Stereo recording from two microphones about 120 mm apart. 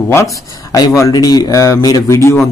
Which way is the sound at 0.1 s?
30° left (ahead or behind).